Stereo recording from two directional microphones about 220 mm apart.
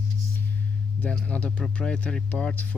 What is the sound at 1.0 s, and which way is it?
Speech, 5° left (ahead or behind).